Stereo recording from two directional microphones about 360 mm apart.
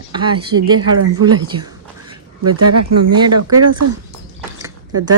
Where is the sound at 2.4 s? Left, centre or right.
Right.